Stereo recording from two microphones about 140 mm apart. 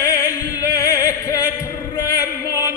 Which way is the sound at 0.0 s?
25° left (ahead or behind).